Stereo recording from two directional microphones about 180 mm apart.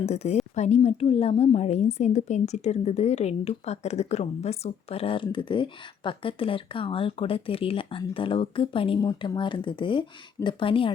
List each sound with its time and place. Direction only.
0.0 s a woman's voice: 35° left (ahead or behind)